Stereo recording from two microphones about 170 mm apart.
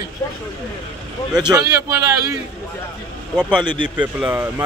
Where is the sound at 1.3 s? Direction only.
5° right (ahead or behind).